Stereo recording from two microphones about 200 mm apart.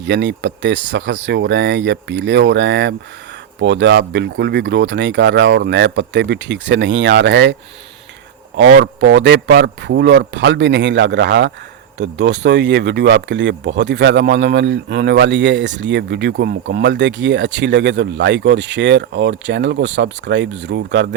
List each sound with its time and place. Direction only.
0.0 s speech: 60° right (ahead or behind)
8.5 s speech: 60° right (ahead or behind)